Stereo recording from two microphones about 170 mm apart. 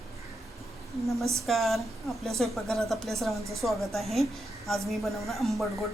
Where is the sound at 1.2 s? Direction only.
15° right (ahead or behind).